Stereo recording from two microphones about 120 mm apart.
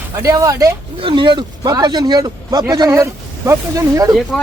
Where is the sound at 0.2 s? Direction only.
25° right (ahead or behind).